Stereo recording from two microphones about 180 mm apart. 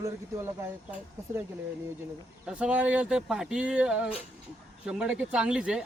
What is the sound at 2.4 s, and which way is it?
Speech, 5° right (ahead or behind).